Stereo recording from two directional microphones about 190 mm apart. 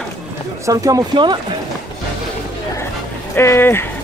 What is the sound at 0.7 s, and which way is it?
Speech, 20° right (ahead or behind).